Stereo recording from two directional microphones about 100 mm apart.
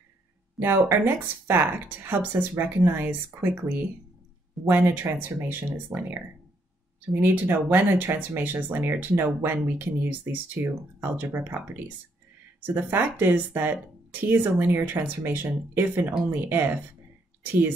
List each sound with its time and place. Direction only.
0.6 s speech: 20° right (ahead or behind)
7.2 s speech: 20° right (ahead or behind)